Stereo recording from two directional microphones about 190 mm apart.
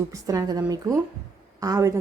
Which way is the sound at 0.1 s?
20° right (ahead or behind).